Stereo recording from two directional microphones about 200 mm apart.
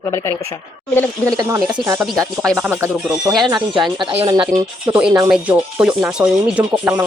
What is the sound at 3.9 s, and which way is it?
Speech, 25° right (ahead or behind).